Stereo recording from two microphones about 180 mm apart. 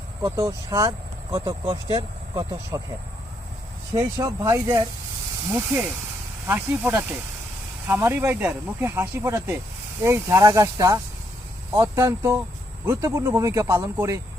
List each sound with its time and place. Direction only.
0.2 s speech: 15° right (ahead or behind)
3.9 s speech: 20° right (ahead or behind)
6.5 s speech: 10° right (ahead or behind)